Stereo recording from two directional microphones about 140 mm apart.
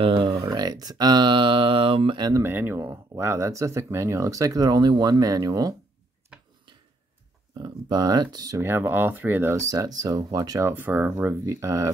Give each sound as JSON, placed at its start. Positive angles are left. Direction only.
{"t": 0.0, "sound": "a sound", "side_deg": -40}
{"t": 2.4, "sound": "speech", "side_deg": -15}
{"t": 7.5, "sound": "speech", "side_deg": -30}
{"t": 8.5, "sound": "speech", "side_deg": -15}